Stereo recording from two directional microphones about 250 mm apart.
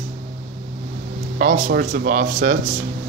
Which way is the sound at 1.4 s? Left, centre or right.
Right.